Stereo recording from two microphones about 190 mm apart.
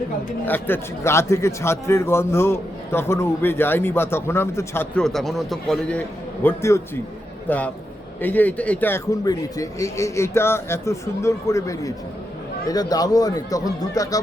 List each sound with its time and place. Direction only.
0.4 s a man's voice: 10° left (ahead or behind)